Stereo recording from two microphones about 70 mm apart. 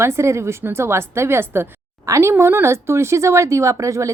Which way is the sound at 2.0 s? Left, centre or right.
Right.